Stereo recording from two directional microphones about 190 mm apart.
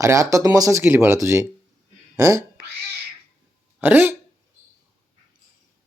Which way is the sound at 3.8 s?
10° right (ahead or behind).